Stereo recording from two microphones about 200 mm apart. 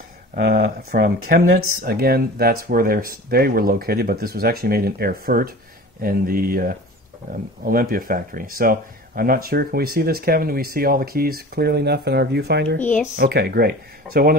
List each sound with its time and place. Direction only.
0.4 s speech: 50° right (ahead or behind)